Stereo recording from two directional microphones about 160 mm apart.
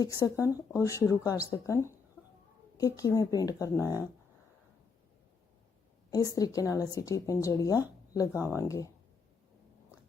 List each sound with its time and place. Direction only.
0.0 s a woman's voice: 20° left (ahead or behind)
6.1 s a woman's voice: 20° left (ahead or behind)